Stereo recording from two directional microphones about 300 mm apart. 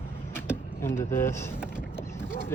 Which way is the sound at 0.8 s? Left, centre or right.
Centre.